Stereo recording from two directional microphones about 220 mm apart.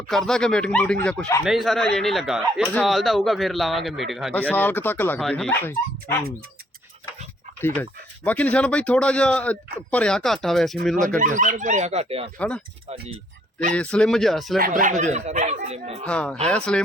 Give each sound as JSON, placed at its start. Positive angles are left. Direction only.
{"t": 0.1, "sound": "speech", "side_deg": 0}
{"t": 7.6, "sound": "speech", "side_deg": 10}
{"t": 11.2, "sound": "speech", "side_deg": -35}
{"t": 12.4, "sound": "speech", "side_deg": 5}
{"t": 13.7, "sound": "speech", "side_deg": 5}
{"t": 14.6, "sound": "speech", "side_deg": -35}
{"t": 16.0, "sound": "speech", "side_deg": 5}